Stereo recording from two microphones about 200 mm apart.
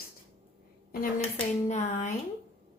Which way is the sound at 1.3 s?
35° left (ahead or behind).